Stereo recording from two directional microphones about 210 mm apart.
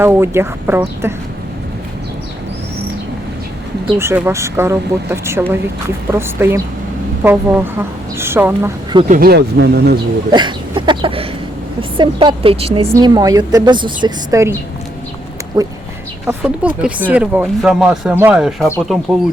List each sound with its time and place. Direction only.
0.0 s speech: 10° right (ahead or behind)
3.9 s speech: 10° right (ahead or behind)
9.0 s speech: 45° right (ahead or behind)
10.3 s a sound: 20° right (ahead or behind)
11.8 s a woman's voice: 25° right (ahead or behind)
15.6 s speech: 15° right (ahead or behind)
16.2 s speech: 5° right (ahead or behind)